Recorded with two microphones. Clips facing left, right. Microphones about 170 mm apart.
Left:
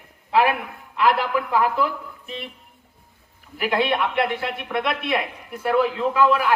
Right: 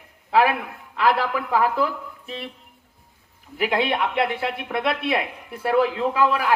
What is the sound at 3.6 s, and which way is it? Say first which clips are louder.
A man's voice: even; 25° right (ahead or behind).